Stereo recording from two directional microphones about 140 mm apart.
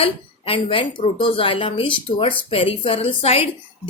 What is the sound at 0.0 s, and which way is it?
A woman's voice, 40° left (ahead or behind).